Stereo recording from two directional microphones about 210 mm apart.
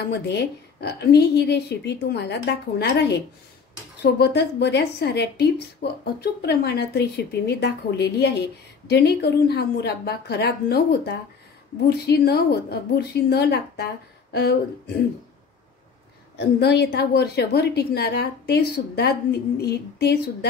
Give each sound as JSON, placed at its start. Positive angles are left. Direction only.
{"t": 0.0, "sound": "a woman's voice", "side_deg": 55}
{"t": 16.3, "sound": "a woman's voice", "side_deg": 55}